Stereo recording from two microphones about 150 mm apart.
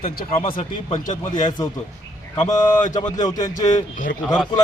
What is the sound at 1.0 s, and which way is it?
Speech, 60° left (ahead or behind).